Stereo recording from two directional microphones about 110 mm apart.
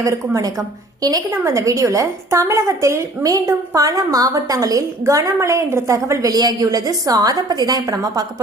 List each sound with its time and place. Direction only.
0.0 s a woman's voice: 30° right (ahead or behind)